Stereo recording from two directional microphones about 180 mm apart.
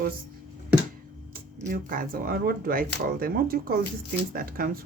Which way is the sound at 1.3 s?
50° right (ahead or behind).